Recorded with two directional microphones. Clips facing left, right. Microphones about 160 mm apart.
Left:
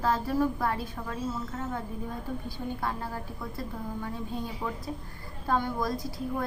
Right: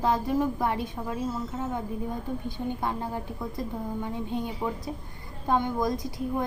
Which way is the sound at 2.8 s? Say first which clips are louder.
Right 3 dB; 20° right (ahead or behind).